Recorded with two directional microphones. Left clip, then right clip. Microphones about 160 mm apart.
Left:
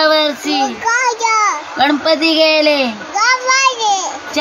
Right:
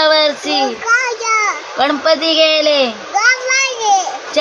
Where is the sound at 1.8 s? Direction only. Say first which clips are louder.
Even; 5° right (ahead or behind).